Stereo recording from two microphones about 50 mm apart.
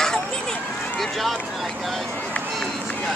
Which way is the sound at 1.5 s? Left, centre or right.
Centre.